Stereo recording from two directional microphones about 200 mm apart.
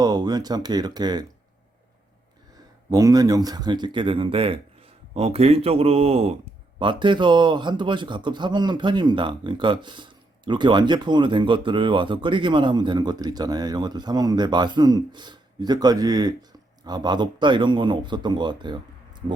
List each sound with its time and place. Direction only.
0.0 s a man's voice: 20° right (ahead or behind)
2.9 s a man's voice: 20° right (ahead or behind)